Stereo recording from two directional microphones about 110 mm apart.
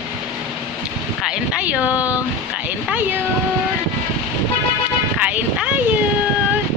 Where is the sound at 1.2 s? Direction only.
10° right (ahead or behind).